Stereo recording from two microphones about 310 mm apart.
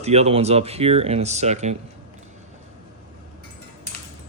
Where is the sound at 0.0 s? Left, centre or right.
Right.